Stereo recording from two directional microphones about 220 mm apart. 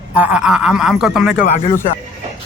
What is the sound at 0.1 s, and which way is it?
Speech, 5° right (ahead or behind).